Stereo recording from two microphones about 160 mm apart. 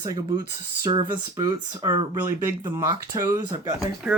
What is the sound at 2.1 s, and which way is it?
Speech, 15° right (ahead or behind).